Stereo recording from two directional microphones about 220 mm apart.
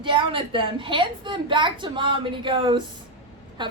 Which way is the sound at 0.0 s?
20° right (ahead or behind).